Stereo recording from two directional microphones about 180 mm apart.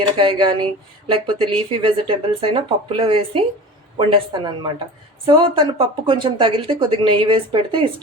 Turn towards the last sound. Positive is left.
turn(degrees=-30)  # may be behind; listen again after turning